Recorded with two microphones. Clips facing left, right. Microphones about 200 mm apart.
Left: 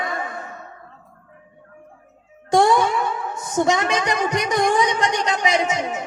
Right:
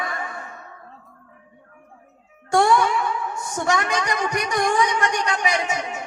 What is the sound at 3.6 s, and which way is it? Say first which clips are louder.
Speech: even; 20° left (ahead or behind).